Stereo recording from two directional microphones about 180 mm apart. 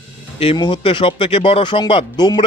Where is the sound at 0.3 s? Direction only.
30° left (ahead or behind).